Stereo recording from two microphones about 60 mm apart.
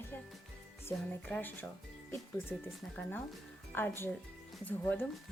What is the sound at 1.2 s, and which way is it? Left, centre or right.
Speech, left.